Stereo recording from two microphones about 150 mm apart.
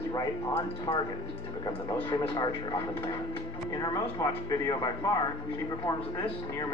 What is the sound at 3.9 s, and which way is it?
Speech, 25° left (ahead or behind).